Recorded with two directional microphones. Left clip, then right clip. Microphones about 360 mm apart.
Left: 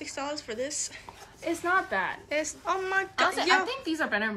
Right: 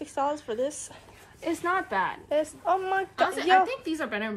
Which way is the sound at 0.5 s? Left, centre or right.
Centre.